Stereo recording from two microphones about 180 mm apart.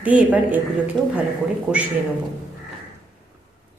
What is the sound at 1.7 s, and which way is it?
Speech, 5° right (ahead or behind).